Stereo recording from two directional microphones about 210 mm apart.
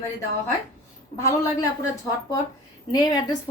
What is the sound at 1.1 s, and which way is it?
Speech, 15° left (ahead or behind).